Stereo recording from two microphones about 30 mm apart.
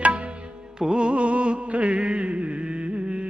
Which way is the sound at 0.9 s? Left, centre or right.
Right.